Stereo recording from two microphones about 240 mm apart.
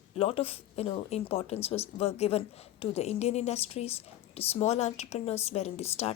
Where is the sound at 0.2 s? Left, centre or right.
Left.